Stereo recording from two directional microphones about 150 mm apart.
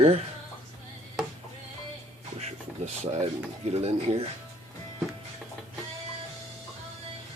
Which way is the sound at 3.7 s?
45° right (ahead or behind).